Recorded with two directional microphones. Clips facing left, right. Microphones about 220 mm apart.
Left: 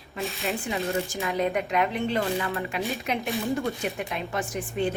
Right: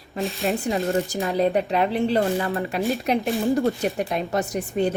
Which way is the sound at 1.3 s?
35° right (ahead or behind).